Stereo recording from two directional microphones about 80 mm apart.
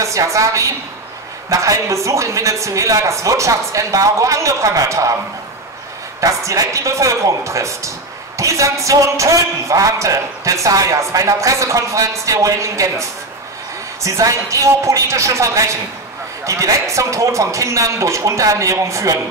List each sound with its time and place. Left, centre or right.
0.0 s a man's voice: right
6.2 s a man's voice: right